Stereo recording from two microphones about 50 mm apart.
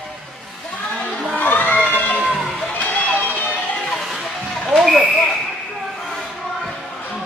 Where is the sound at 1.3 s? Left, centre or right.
Left.